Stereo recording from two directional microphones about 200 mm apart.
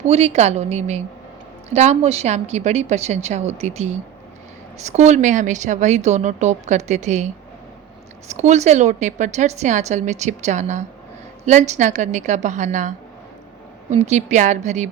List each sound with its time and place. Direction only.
0.0 s speech: 30° right (ahead or behind)
8.3 s speech: 35° right (ahead or behind)
13.9 s speech: 35° right (ahead or behind)